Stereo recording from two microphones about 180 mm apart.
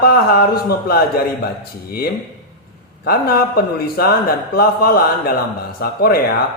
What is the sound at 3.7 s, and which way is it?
A man's voice, 55° left (ahead or behind).